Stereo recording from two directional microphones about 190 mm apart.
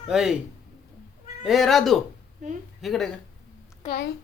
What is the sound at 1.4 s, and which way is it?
Speech, centre (ahead or behind).